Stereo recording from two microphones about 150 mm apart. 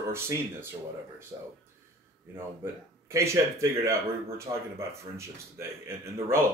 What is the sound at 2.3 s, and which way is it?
Speech, 15° right (ahead or behind).